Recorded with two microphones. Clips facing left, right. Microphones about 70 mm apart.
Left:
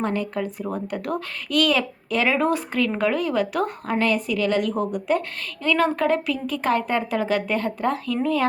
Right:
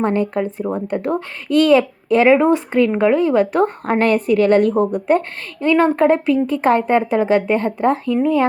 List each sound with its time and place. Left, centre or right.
0.0 s a woman's voice: right